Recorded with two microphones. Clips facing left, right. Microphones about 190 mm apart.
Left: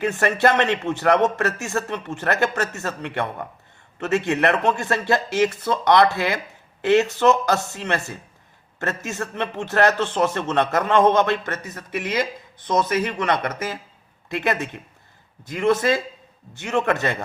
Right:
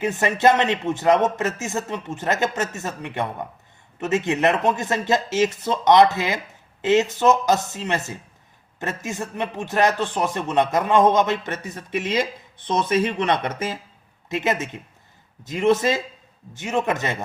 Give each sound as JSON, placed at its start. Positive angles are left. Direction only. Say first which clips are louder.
{"t": 0.0, "sound": "a man's voice", "louder": "right 1 dB", "side_deg": -15}